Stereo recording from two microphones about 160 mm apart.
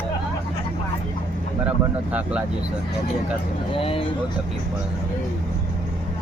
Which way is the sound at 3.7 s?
35° left (ahead or behind).